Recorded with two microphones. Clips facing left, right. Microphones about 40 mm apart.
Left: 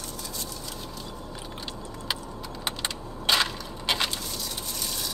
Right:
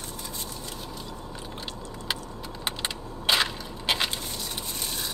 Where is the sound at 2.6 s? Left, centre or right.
Centre.